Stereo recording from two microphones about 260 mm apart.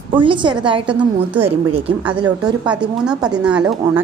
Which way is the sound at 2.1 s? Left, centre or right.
Centre.